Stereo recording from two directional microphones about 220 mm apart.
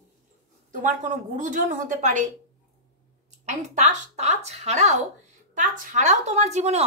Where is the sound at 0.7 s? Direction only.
35° right (ahead or behind).